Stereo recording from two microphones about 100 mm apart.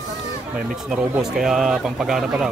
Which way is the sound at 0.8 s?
5° right (ahead or behind).